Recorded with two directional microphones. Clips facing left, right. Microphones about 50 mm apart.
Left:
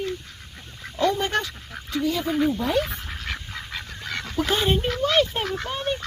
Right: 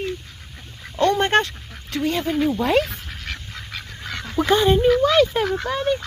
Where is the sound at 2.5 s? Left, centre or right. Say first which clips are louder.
Right 4 dB; right.